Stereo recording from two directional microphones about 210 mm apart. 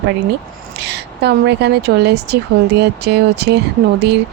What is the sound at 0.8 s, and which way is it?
A woman's voice, 55° right (ahead or behind).